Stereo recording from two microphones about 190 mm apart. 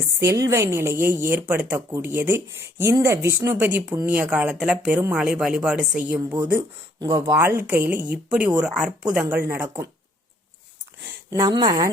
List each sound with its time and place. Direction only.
0.0 s a sound: 15° right (ahead or behind)
0.4 s speech: 15° right (ahead or behind)
6.1 s speech: 20° right (ahead or behind)
11.3 s speech: 20° right (ahead or behind)